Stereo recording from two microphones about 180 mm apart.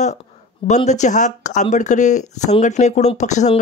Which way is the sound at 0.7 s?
40° left (ahead or behind).